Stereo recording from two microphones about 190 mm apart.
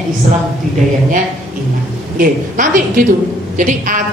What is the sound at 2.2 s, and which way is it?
A woman's voice, 45° right (ahead or behind).